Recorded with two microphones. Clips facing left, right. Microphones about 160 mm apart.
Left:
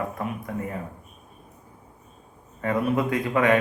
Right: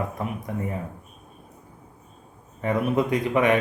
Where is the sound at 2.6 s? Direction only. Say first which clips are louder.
Right 1 dB; 20° right (ahead or behind).